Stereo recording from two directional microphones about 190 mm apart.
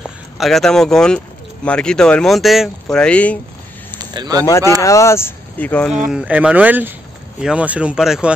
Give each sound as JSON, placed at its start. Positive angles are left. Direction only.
{"t": 0.0, "sound": "speech", "side_deg": 0}
{"t": 4.0, "sound": "speech", "side_deg": -20}
{"t": 4.5, "sound": "speech", "side_deg": 15}
{"t": 6.0, "sound": "speech", "side_deg": -5}